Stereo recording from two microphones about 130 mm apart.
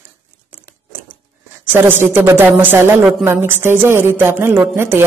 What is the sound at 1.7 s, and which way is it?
Speech, 15° right (ahead or behind).